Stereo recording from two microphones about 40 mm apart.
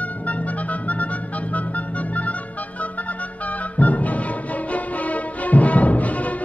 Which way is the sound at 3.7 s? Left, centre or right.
Left.